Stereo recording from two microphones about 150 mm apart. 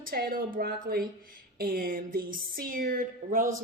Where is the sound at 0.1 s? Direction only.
85° right.